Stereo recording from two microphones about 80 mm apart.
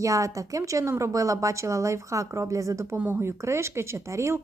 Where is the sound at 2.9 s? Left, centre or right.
Right.